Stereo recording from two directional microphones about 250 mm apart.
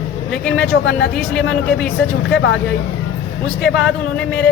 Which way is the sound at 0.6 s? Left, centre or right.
Left.